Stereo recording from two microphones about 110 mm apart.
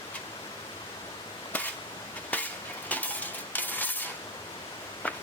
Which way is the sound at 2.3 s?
15° left (ahead or behind).